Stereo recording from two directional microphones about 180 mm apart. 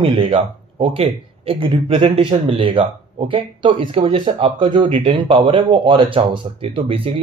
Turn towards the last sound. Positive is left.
turn(degrees=-30)  # may be behind; listen again after turning